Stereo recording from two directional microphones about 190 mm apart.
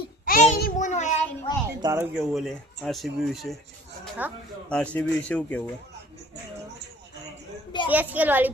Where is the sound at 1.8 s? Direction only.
15° right (ahead or behind).